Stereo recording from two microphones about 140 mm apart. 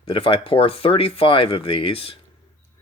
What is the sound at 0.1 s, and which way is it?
Speech, 40° left (ahead or behind).